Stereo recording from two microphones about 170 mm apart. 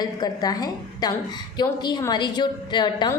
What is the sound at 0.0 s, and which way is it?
A woman's voice, 25° left (ahead or behind).